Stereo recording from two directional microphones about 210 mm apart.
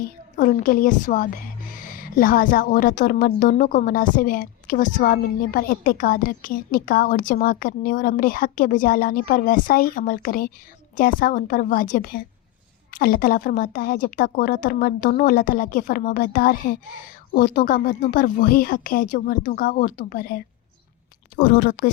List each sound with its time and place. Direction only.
0.0 s a woman's voice: 40° left (ahead or behind)